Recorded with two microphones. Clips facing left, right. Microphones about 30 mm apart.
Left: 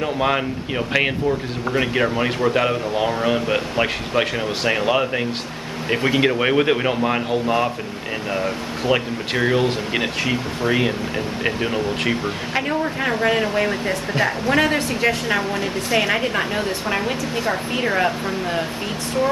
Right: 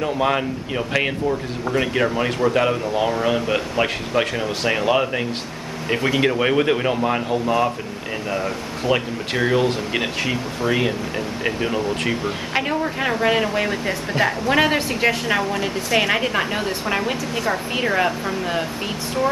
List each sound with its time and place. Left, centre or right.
0.0 s speech: centre
12.5 s speech: centre
17.7 s speech: centre